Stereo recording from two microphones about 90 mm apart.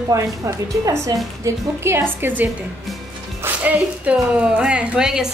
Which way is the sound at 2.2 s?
20° right (ahead or behind).